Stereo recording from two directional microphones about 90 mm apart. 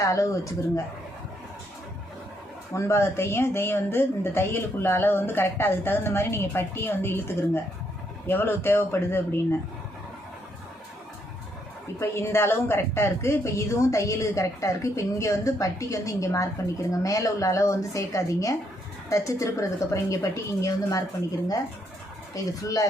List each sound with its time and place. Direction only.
0.0 s speech: 35° left (ahead or behind)
2.7 s speech: 30° left (ahead or behind)
11.9 s speech: 30° left (ahead or behind)
22.6 s speech: 40° left (ahead or behind)